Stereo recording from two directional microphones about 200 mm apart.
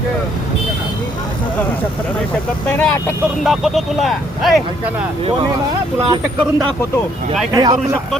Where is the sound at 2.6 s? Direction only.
10° left (ahead or behind).